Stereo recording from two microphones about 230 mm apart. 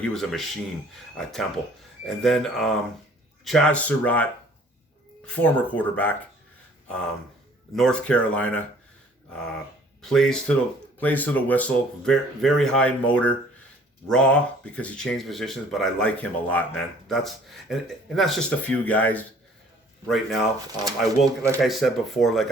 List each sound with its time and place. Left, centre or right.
0.0 s speech: centre
7.8 s speech: centre
10.0 s speech: centre